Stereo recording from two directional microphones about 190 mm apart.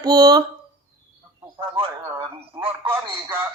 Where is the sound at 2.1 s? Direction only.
30° right (ahead or behind).